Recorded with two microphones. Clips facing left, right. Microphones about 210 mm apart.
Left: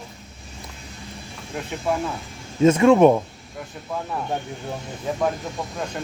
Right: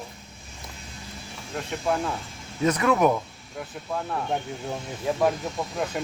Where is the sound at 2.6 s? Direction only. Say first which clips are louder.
Left 8 dB; 25° left (ahead or behind).